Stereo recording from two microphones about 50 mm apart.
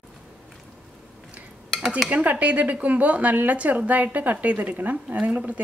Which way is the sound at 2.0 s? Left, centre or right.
Right.